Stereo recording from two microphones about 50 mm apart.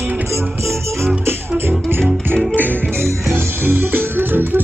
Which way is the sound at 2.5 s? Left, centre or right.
Right.